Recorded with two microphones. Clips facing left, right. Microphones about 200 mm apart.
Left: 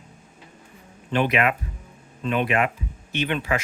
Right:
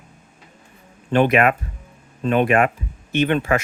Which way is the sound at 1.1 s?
50° right (ahead or behind).